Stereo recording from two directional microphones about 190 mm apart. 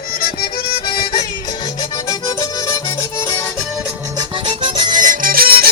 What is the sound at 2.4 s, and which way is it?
Music, 15° left (ahead or behind).